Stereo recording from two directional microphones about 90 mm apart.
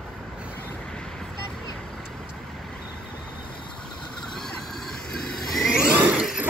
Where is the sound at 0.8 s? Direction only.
10° left (ahead or behind).